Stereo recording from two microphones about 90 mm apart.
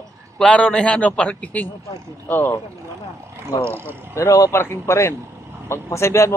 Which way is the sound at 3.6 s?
25° right (ahead or behind).